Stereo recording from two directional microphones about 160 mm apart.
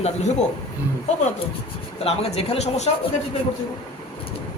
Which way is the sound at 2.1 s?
40° left (ahead or behind).